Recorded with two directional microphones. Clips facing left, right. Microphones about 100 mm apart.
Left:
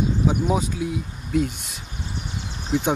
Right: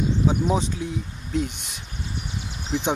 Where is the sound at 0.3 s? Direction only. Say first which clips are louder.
Even; 5° left (ahead or behind).